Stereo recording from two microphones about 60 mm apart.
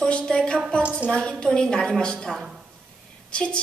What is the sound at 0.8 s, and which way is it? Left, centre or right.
Speech, right.